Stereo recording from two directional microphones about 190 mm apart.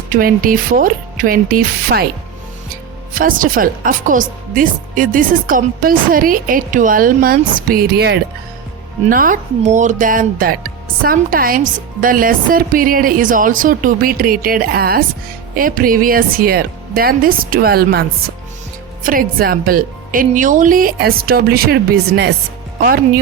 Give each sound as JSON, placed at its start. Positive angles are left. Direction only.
{"t": 0.1, "sound": "speech", "side_deg": -50}
{"t": 3.2, "sound": "speech", "side_deg": -45}
{"t": 9.0, "sound": "speech", "side_deg": -45}
{"t": 19.0, "sound": "speech", "side_deg": -50}